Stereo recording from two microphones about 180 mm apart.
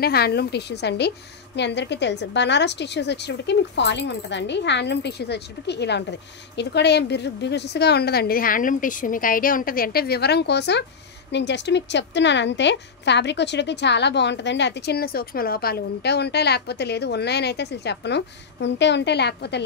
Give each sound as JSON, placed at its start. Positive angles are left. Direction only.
{"t": 0.0, "sound": "a woman's voice", "side_deg": 60}